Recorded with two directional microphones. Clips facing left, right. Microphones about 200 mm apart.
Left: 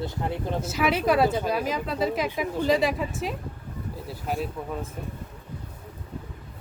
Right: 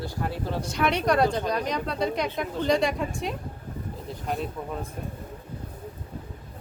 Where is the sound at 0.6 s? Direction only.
5° left (ahead or behind).